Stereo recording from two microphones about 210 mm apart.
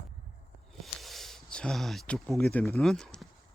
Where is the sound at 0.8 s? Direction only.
Centre (ahead or behind).